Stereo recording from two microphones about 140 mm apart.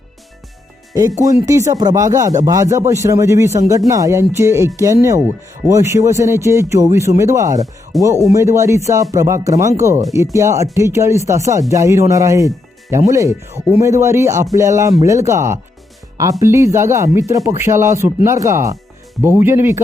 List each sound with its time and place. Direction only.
1.2 s speech: 25° right (ahead or behind)